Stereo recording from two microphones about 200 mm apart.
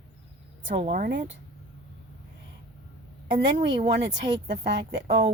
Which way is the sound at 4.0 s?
60° right (ahead or behind).